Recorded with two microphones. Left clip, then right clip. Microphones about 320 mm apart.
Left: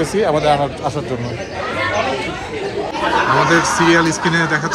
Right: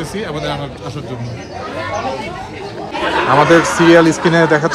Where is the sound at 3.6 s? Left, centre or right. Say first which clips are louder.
Right 4 dB; centre.